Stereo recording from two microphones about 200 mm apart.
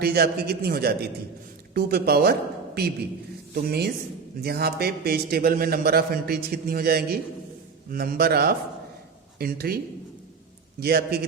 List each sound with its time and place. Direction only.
0.0 s a man's voice: 50° right (ahead or behind)
3.5 s a man's voice: 55° right (ahead or behind)